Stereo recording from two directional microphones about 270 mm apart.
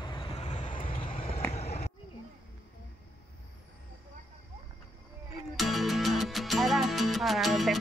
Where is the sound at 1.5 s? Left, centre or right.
Left.